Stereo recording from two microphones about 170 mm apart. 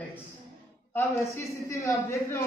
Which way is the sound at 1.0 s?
15° left (ahead or behind).